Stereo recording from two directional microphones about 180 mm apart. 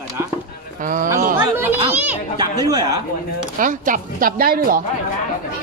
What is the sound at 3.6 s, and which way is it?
Speech, 50° right (ahead or behind).